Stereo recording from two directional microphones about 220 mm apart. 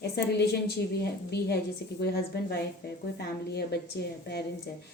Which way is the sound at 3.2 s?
45° left (ahead or behind).